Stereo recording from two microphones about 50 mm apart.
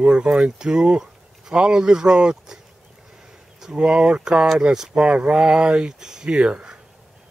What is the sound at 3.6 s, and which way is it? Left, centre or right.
Speech, centre.